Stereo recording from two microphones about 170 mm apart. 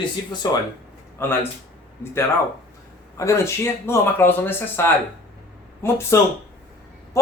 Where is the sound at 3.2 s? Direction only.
20° left (ahead or behind).